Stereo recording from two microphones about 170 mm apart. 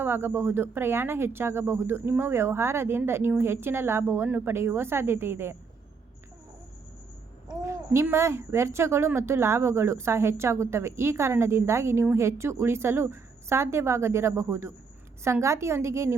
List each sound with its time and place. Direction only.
0.0 s a woman's voice: 15° right (ahead or behind)
7.4 s a woman's voice: 15° right (ahead or behind)